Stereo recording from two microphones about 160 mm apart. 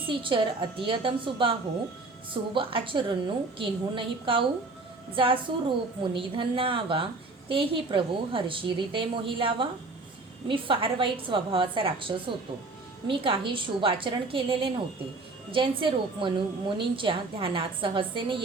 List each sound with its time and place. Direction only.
0.1 s a woman's voice: 30° right (ahead or behind)